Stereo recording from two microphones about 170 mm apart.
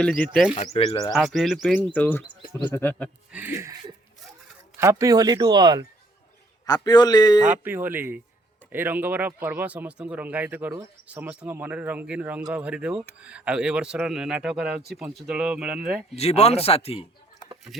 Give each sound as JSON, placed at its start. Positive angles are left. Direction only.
{"t": 0.0, "sound": "speech", "side_deg": 5}
{"t": 0.5, "sound": "speech", "side_deg": 40}
{"t": 1.1, "sound": "speech", "side_deg": 0}
{"t": 1.9, "sound": "speech", "side_deg": 10}
{"t": 3.3, "sound": "speech", "side_deg": -10}
{"t": 4.8, "sound": "speech", "side_deg": -15}
{"t": 6.7, "sound": "a man's voice", "side_deg": 25}
{"t": 7.6, "sound": "speech", "side_deg": -10}
{"t": 16.1, "sound": "speech", "side_deg": 40}